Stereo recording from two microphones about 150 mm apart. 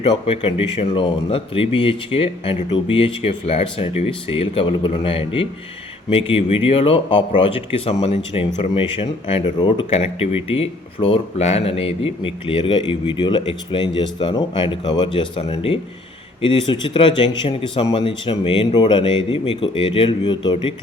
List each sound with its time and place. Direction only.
0.0 s speech: 40° left (ahead or behind)